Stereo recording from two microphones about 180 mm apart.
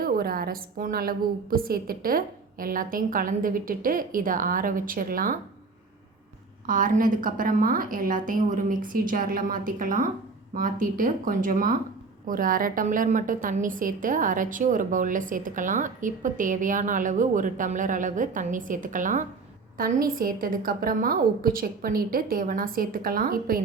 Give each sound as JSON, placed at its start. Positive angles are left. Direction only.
{"t": 0.0, "sound": "a woman's voice", "side_deg": -55}
{"t": 6.7, "sound": "a woman's voice", "side_deg": -50}